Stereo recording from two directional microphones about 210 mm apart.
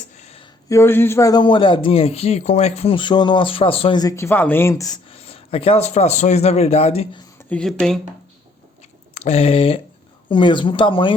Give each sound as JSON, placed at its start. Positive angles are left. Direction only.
{"t": 0.2, "sound": "a sound", "side_deg": 30}
{"t": 0.7, "sound": "speech", "side_deg": 10}
{"t": 7.3, "sound": "speech", "side_deg": 5}
{"t": 9.1, "sound": "speech", "side_deg": 30}